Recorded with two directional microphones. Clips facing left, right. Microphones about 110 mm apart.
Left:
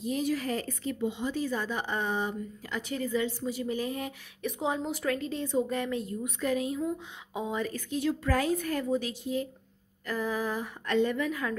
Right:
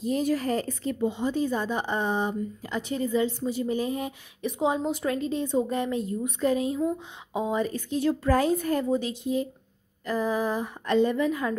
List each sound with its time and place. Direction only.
0.0 s speech: 45° right (ahead or behind); by 8.0 s 25° right (ahead or behind)
8.0 s speech: 35° right (ahead or behind)